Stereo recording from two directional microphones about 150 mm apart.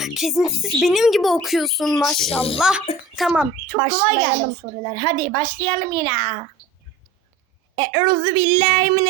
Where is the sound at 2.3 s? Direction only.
40° left (ahead or behind).